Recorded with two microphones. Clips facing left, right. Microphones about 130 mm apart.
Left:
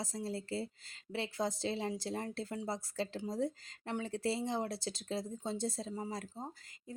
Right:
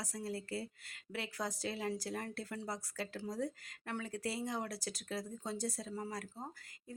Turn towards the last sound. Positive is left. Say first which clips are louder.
# left 2 dB
turn(degrees=20)  # may be behind; listen again after turning